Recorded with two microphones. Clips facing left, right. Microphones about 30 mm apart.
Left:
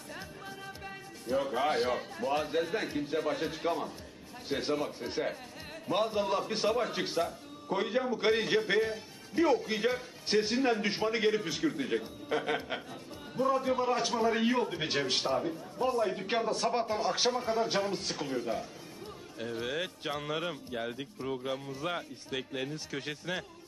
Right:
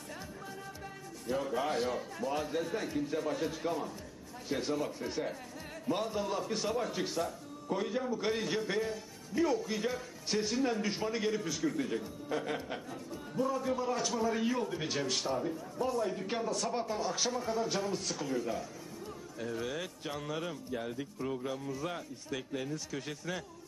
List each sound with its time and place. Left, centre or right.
1.4 s a man's voice: left